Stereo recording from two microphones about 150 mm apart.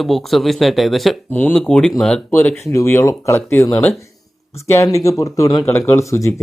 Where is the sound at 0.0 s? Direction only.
Centre (ahead or behind).